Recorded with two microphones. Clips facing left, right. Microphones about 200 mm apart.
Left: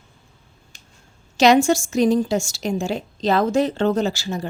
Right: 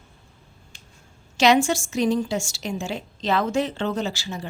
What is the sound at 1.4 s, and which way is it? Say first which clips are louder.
A woman's voice: left 4 dB; 40° left (ahead or behind).